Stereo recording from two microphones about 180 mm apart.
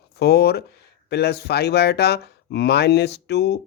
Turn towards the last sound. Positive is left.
turn(degrees=65)  # may be behind; listen again after turning